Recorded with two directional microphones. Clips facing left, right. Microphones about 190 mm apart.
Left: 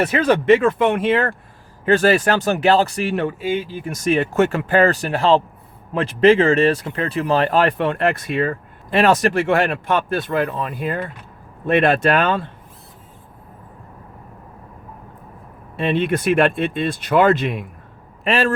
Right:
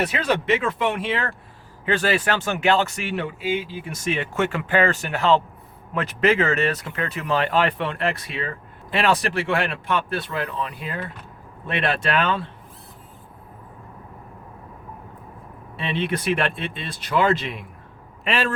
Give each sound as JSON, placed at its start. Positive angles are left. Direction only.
{"t": 0.0, "sound": "speech", "side_deg": 50}
{"t": 15.8, "sound": "speech", "side_deg": 50}